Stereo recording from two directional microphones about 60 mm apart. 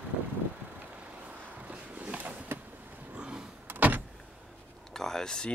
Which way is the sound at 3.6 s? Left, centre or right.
Right.